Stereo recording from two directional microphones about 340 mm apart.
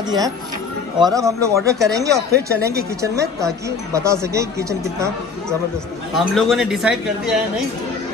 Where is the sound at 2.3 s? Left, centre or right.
Right.